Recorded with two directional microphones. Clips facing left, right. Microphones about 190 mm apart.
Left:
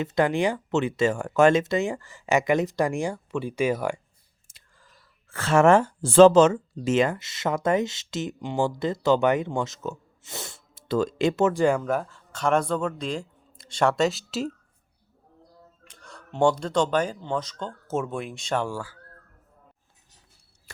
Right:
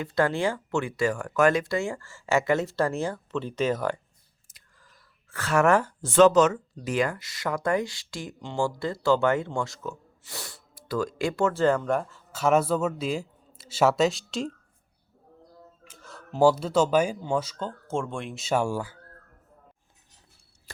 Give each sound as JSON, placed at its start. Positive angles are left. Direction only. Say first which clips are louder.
{"t": 0.0, "sound": "speech", "louder": "left 2 dB", "side_deg": 20}
{"t": 4.4, "sound": "speech", "louder": "left 2 dB", "side_deg": 25}
{"t": 15.8, "sound": "speech", "louder": "left 1 dB", "side_deg": -5}
{"t": 17.8, "sound": "speech", "louder": "left 3 dB", "side_deg": 5}
{"t": 20.7, "sound": "a sound", "louder": "right 2 dB", "side_deg": -35}